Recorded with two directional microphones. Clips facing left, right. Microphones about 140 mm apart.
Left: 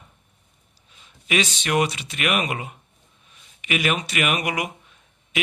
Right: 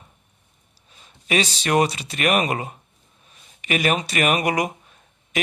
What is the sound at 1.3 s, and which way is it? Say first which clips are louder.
Speech: right 2 dB; 35° right (ahead or behind).